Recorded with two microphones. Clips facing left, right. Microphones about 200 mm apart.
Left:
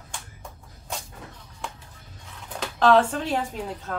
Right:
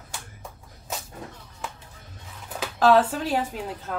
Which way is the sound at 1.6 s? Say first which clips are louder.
Even; 5° right (ahead or behind).